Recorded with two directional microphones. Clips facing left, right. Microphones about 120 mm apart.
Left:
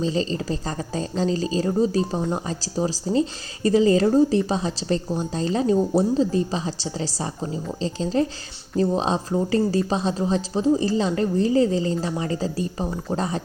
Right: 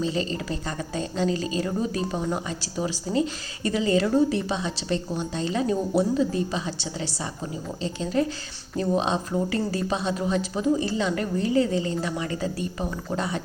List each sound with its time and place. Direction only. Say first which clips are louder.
0.0 s speech: left 3 dB; 30° left (ahead or behind)